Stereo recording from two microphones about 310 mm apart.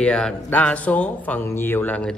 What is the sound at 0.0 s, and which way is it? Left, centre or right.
Speech, centre.